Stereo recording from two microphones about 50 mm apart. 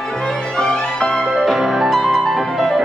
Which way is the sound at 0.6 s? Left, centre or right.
Centre.